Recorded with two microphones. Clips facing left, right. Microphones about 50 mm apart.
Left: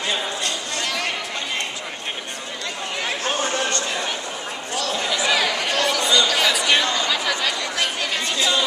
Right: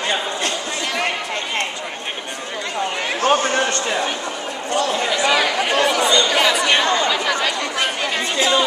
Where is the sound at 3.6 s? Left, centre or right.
Right.